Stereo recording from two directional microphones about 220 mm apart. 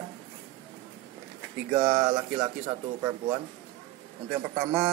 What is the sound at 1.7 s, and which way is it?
A man's voice, 15° right (ahead or behind).